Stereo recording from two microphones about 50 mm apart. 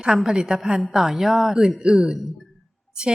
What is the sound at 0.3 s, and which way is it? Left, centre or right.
A woman's voice, centre.